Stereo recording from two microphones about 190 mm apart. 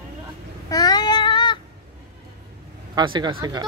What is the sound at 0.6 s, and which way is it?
Child singing, 20° left (ahead or behind).